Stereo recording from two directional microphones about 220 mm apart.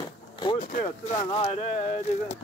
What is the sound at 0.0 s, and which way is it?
Vehicle, 20° left (ahead or behind).